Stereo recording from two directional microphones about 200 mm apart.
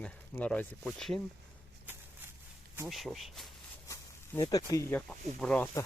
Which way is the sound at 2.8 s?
Centre (ahead or behind).